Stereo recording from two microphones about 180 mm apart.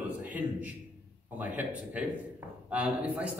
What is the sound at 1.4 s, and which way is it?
A man's voice, 10° right (ahead or behind).